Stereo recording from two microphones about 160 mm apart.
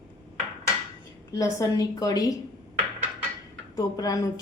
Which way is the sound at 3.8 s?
20° left (ahead or behind).